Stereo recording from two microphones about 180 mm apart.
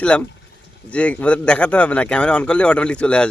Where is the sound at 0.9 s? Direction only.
5° left (ahead or behind).